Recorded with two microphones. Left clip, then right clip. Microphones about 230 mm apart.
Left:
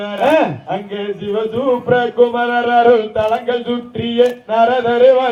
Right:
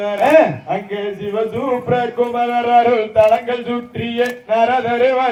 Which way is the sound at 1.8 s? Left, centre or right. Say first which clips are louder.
Left 6 dB; left.